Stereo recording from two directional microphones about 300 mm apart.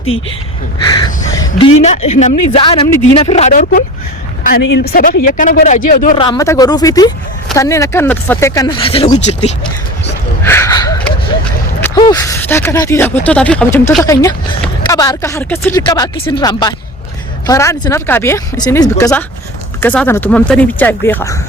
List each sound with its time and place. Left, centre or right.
0.8 s speech: centre
4.9 s speech: left
6.2 s speech: centre
10.4 s a sound: centre
11.8 s speech: centre